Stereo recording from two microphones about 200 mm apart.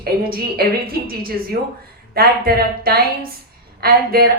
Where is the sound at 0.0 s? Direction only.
50° right (ahead or behind).